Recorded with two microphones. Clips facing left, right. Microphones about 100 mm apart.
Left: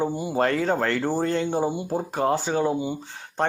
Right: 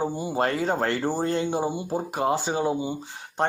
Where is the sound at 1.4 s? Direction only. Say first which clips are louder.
Left 2 dB; 10° right (ahead or behind).